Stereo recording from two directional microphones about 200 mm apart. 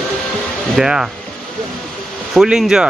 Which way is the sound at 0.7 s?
5° right (ahead or behind).